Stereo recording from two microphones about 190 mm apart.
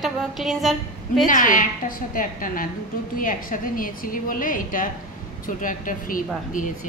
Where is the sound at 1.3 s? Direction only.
45° left (ahead or behind).